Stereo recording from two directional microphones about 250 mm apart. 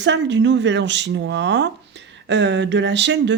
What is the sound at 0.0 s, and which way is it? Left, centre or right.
Speech, right.